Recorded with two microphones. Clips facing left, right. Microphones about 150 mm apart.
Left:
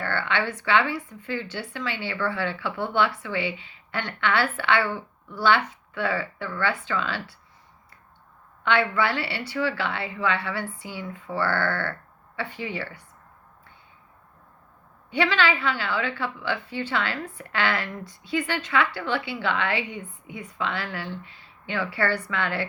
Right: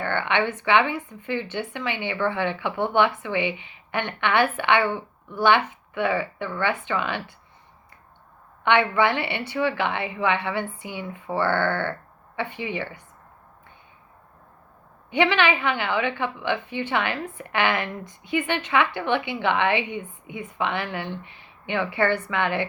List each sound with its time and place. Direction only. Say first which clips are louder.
0.0 s a woman's voice: right 3 dB; 20° right (ahead or behind)
8.6 s a woman's voice: right 3 dB; 20° right (ahead or behind)
15.1 s a woman's voice: right 3 dB; 20° right (ahead or behind)